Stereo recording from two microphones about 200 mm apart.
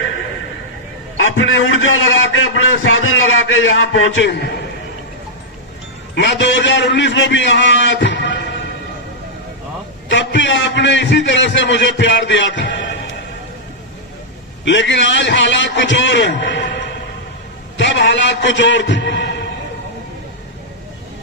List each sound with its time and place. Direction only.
1.1 s a man's voice: 75° left (ahead or behind)
6.1 s a man's voice: 65° left (ahead or behind)
10.1 s a man's voice: 65° left (ahead or behind)
14.6 s a man's voice: 65° left (ahead or behind)
17.7 s a man's voice: 65° left (ahead or behind)